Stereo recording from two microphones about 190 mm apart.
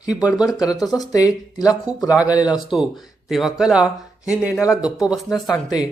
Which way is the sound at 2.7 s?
5° right (ahead or behind).